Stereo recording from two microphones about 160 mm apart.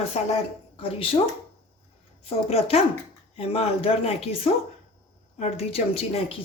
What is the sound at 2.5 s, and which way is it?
Speech, 40° left (ahead or behind).